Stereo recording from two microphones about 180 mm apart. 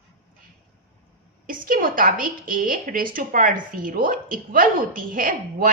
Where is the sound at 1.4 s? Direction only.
50° right (ahead or behind).